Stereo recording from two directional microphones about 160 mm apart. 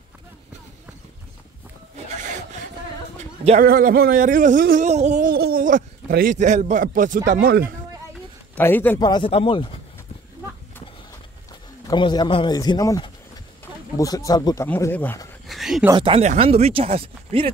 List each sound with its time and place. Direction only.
2.0 s filing: 50° right (ahead or behind)
3.6 s speech: 65° right (ahead or behind); by 5.3 s 45° right (ahead or behind)
5.3 s speech: 70° right (ahead or behind)
8.5 s a man's voice: 10° left (ahead or behind)
9.0 s speech: 30° left (ahead or behind)
11.9 s speech: 25° left (ahead or behind)
15.4 s a sound: centre (ahead or behind)
15.9 s speech: 35° right (ahead or behind)